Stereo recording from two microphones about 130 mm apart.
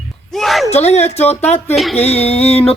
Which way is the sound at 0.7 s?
55° left (ahead or behind).